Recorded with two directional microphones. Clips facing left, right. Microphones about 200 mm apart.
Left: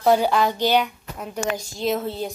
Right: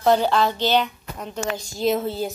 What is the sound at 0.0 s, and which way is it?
A woman's voice, 10° left (ahead or behind).